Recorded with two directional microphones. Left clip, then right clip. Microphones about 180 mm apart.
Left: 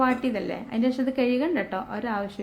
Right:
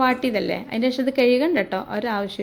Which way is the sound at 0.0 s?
20° right (ahead or behind).